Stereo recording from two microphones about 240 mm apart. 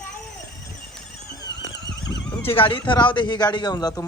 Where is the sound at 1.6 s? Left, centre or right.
Left.